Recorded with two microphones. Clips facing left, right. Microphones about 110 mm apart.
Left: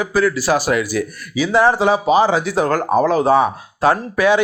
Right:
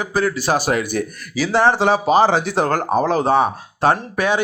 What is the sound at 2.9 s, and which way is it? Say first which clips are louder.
Speech: left 3 dB; 25° right (ahead or behind).